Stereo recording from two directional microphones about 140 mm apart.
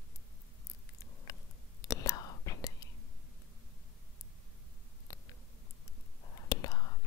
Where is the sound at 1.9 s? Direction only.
25° left (ahead or behind).